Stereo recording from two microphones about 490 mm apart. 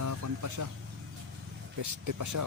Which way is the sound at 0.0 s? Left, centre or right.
Right.